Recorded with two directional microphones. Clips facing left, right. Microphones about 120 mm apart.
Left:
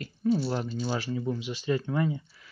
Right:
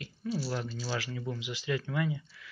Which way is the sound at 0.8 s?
20° left (ahead or behind).